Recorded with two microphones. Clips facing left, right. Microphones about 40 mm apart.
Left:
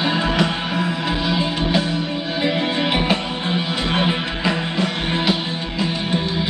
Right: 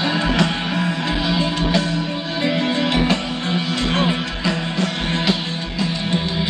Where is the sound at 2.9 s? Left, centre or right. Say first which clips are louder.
Right 1 dB; centre.